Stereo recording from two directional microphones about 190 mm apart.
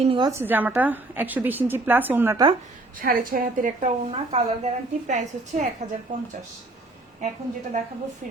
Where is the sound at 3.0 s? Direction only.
50° right (ahead or behind).